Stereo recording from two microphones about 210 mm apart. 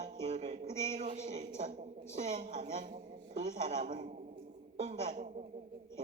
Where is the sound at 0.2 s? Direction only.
30° right (ahead or behind).